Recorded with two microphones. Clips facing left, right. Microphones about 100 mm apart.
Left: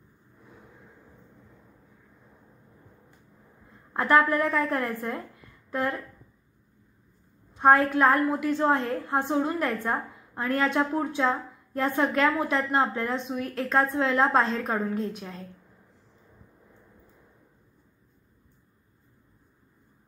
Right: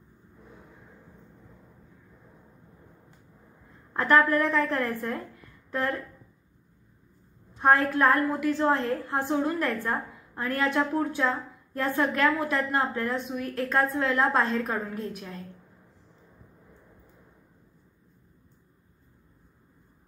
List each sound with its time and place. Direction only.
3.9 s a woman's voice: 20° left (ahead or behind)
7.9 s a woman's voice: 20° left (ahead or behind)